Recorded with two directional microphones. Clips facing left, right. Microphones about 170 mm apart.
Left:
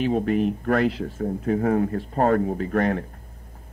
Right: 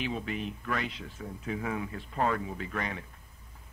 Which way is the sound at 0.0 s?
45° left (ahead or behind).